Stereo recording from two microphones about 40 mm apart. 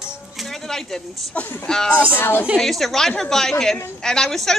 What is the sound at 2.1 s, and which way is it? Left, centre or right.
Speech, left.